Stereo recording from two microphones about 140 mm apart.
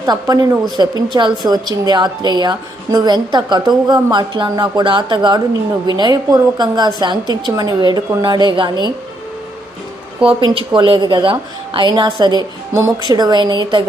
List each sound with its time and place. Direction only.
0.0 s a woman's voice: 30° right (ahead or behind)
10.2 s a woman's voice: 40° right (ahead or behind)